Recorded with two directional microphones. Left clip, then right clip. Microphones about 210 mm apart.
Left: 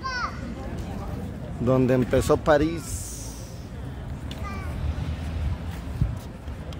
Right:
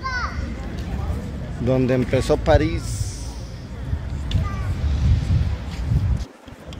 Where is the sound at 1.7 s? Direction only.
15° left (ahead or behind).